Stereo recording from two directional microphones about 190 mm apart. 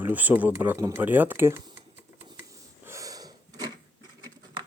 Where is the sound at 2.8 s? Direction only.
15° right (ahead or behind).